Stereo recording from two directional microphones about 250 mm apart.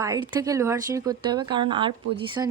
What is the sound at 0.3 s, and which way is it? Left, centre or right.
Speech, centre.